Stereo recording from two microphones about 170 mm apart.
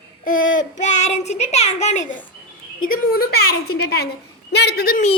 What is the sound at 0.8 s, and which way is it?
Child singing, 45° left (ahead or behind).